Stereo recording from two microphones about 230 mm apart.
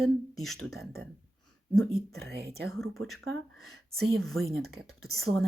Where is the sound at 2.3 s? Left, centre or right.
Right.